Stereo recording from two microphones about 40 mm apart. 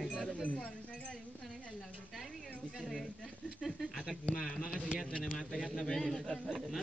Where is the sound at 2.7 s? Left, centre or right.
Centre.